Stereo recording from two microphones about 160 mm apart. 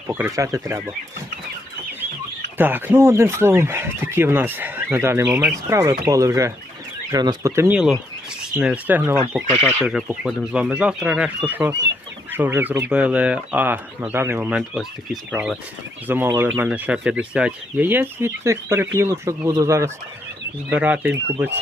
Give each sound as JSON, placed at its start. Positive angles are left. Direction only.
{"t": 0.1, "sound": "speech", "side_deg": -15}
{"t": 2.6, "sound": "speech", "side_deg": -10}
{"t": 16.0, "sound": "speech", "side_deg": -15}